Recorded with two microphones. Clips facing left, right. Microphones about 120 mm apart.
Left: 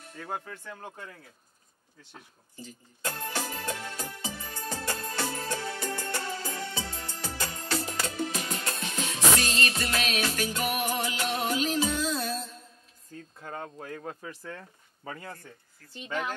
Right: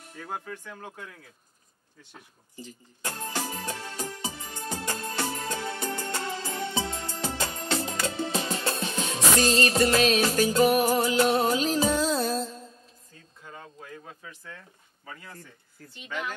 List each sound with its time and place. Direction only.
0.5 s speech: 10° left (ahead or behind)
2.5 s music: 15° right (ahead or behind); by 12.5 s 35° right (ahead or behind)
13.4 s speech: 55° left (ahead or behind); by 16.3 s 35° left (ahead or behind)